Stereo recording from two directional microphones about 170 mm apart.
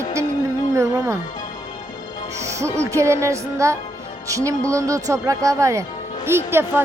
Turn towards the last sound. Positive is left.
turn(degrees=-15)  # may be behind; listen again after turning